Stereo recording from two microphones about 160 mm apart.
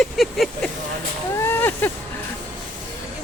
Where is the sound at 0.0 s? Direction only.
Centre (ahead or behind).